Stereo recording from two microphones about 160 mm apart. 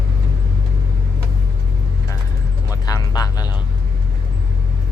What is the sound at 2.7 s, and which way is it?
Music, 20° left (ahead or behind).